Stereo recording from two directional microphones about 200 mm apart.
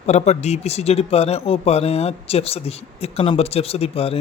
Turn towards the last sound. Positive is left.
turn(degrees=30)  # may be behind; listen again after turning